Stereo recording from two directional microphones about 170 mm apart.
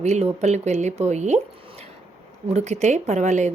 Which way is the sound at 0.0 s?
40° right (ahead or behind).